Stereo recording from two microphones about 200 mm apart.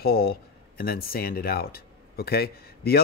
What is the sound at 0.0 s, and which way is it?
Speech, 50° left (ahead or behind).